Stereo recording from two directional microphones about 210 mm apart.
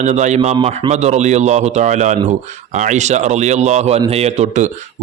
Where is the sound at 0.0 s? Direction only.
35° right (ahead or behind).